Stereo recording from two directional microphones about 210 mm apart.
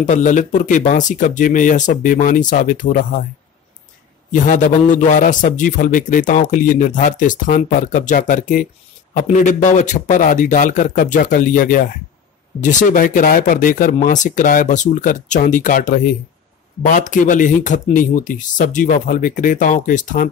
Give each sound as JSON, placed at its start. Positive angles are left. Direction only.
{"t": 0.0, "sound": "a man's voice", "side_deg": 35}
{"t": 4.3, "sound": "a man's voice", "side_deg": 40}